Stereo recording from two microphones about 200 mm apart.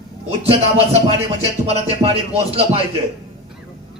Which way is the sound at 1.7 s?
30° right (ahead or behind).